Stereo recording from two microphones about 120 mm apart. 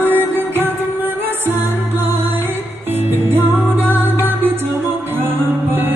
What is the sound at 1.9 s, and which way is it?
Music, 20° right (ahead or behind).